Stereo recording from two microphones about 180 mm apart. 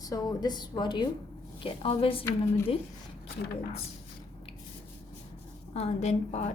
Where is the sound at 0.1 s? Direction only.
20° left (ahead or behind).